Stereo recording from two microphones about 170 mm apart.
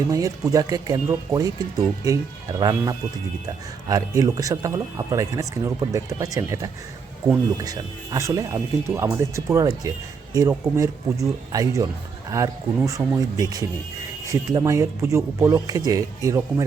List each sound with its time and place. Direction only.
0.1 s speech: 20° right (ahead or behind)